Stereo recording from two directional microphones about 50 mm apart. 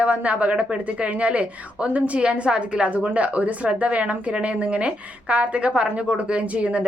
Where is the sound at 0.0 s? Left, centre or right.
Right.